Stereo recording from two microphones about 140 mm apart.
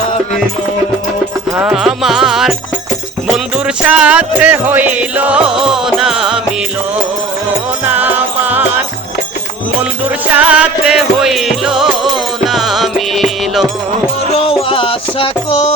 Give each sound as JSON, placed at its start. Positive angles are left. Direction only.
{"t": 1.5, "sound": "music", "side_deg": -10}
{"t": 3.8, "sound": "music", "side_deg": -10}
{"t": 7.9, "sound": "music", "side_deg": -10}
{"t": 10.3, "sound": "music", "side_deg": -10}
{"t": 14.3, "sound": "music", "side_deg": 45}